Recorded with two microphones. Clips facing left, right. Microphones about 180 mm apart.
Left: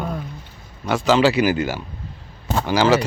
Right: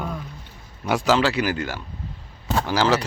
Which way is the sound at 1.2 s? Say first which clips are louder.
Left 5 dB; 5° left (ahead or behind).